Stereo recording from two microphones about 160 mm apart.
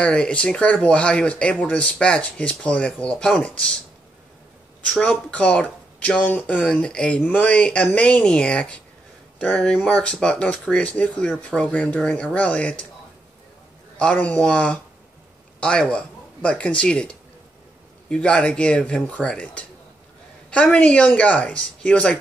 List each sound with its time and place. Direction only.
0.0 s speech: 5° left (ahead or behind)
4.8 s speech: 10° left (ahead or behind)
13.9 s speech: 5° left (ahead or behind)